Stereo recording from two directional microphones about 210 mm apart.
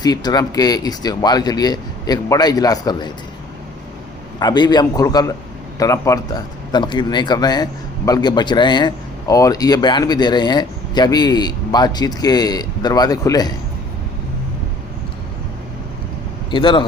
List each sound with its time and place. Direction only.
0.0 s a man's voice: 20° left (ahead or behind)
4.4 s a man's voice: 20° left (ahead or behind)
16.5 s a man's voice: 20° left (ahead or behind)